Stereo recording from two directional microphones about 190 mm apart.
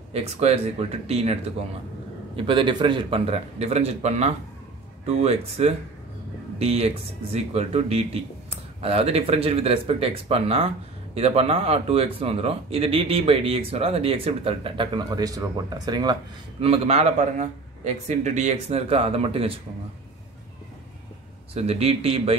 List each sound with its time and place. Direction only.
0.1 s speech: 35° right (ahead or behind)
21.5 s speech: 30° right (ahead or behind)